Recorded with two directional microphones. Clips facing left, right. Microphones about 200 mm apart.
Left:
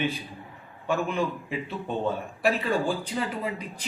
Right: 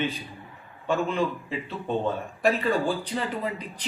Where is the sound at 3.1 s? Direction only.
5° left (ahead or behind).